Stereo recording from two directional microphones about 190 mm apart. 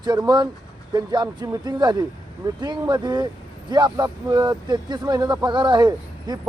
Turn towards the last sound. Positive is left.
turn(degrees=-20)  # may be behind; listen again after turning